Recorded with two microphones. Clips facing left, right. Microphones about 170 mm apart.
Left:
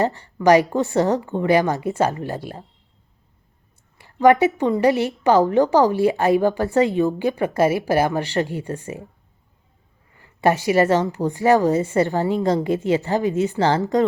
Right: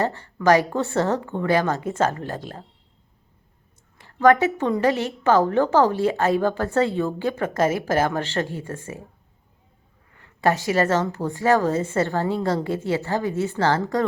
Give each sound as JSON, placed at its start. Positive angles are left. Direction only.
{"t": 0.0, "sound": "a woman's voice", "side_deg": 15}
{"t": 3.9, "sound": "a woman's voice", "side_deg": 15}
{"t": 10.2, "sound": "a woman's voice", "side_deg": 15}